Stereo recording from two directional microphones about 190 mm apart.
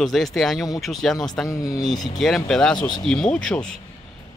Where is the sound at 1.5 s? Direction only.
20° left (ahead or behind).